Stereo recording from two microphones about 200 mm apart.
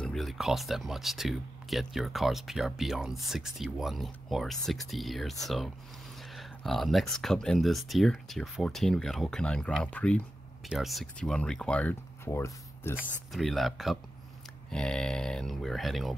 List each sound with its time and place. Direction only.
0.0 s speech: centre (ahead or behind)
12.9 s speech: centre (ahead or behind)